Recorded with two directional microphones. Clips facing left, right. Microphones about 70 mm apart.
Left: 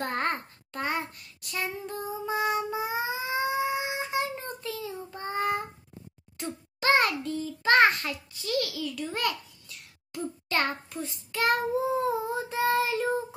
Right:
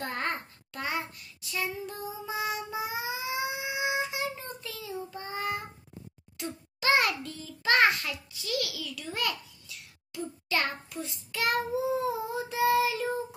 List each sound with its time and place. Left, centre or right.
0.0 s babbling: left
0.3 s child singing: left
2.8 s cat: left
5.1 s child singing: left
6.3 s a sound: left
10.5 s child singing: left